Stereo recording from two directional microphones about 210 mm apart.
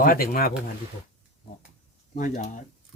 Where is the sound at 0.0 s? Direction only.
45° left (ahead or behind).